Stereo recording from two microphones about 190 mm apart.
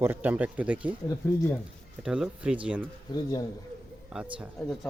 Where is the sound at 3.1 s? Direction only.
20° left (ahead or behind).